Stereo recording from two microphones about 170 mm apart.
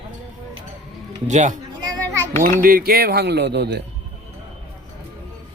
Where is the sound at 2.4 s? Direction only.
55° right (ahead or behind); by 3.8 s 80° right.